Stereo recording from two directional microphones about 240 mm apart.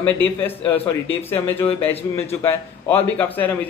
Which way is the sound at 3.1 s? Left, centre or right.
Centre.